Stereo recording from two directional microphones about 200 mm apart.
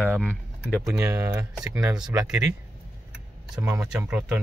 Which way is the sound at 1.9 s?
5° right (ahead or behind).